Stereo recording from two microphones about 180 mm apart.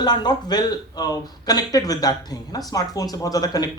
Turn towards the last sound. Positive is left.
turn(degrees=20)  # may be behind; listen again after turning